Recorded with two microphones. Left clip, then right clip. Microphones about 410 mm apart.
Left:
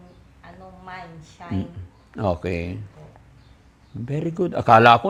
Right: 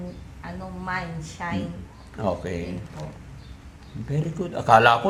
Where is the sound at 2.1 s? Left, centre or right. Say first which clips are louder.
Left 3 dB; left.